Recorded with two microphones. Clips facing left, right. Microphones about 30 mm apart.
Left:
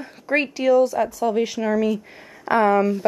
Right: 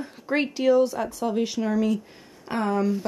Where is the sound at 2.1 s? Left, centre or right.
Left.